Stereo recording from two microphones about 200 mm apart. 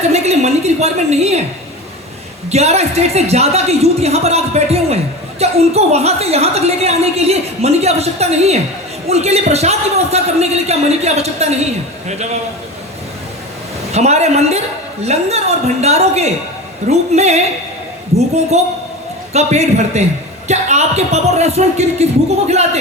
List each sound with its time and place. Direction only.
0.1 s a woman's voice: 35° right (ahead or behind)
2.5 s a man's voice: 30° right (ahead or behind)
13.9 s a man's voice: 35° right (ahead or behind)